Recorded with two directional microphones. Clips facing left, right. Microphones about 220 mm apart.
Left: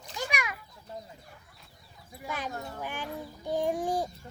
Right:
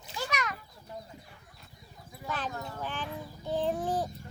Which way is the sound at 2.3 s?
10° left (ahead or behind).